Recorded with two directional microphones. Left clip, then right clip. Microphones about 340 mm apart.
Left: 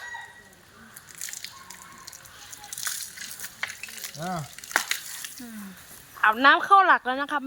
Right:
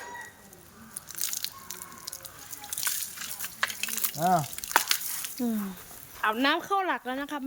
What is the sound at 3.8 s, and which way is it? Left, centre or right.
Water, right.